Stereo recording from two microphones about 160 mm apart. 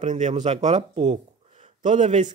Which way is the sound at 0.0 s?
50° right (ahead or behind).